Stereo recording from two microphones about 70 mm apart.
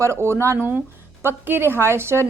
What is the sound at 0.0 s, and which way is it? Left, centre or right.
A woman's voice, right.